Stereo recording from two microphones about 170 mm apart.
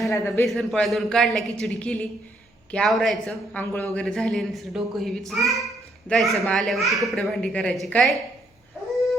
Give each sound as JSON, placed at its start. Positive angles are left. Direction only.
{"t": 0.1, "sound": "speech", "side_deg": 15}
{"t": 0.4, "sound": "a child's voice", "side_deg": 0}